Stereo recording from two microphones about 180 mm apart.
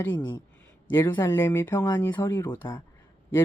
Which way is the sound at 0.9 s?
10° left (ahead or behind).